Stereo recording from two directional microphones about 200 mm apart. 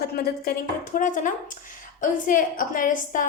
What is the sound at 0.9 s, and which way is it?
A woman's voice, 40° left (ahead or behind).